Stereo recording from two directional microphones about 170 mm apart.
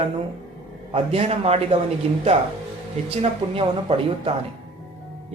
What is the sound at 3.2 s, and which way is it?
Speech, 35° right (ahead or behind).